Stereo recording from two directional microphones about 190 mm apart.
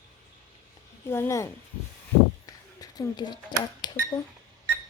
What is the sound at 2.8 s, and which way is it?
Speech, 20° left (ahead or behind).